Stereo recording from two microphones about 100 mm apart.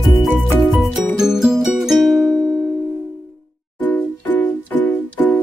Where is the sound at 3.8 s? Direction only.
15° left (ahead or behind).